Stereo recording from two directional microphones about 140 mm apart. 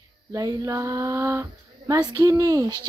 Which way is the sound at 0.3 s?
25° right (ahead or behind).